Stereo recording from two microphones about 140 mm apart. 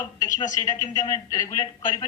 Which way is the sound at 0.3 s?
25° left (ahead or behind).